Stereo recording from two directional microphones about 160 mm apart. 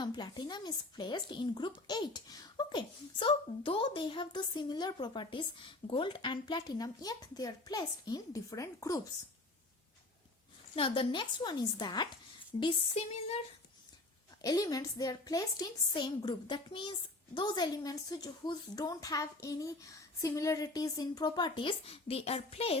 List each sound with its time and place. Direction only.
0.0 s speech: 25° left (ahead or behind)
10.8 s speech: 35° left (ahead or behind)
12.5 s a sound: 35° left (ahead or behind)
14.4 s speech: 25° left (ahead or behind); by 22.8 s 40° left (ahead or behind)